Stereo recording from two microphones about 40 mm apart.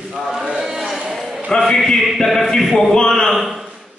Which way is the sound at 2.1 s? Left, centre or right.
Centre.